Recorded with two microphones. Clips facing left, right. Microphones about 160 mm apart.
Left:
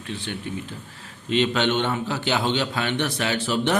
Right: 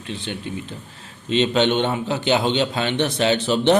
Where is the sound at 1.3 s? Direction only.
20° right (ahead or behind).